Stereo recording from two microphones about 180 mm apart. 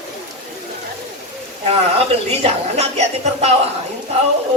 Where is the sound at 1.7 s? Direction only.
35° right (ahead or behind).